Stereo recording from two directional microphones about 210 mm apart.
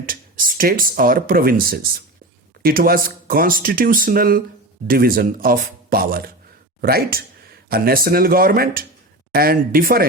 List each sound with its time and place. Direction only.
0.0 s speech: 40° right (ahead or behind)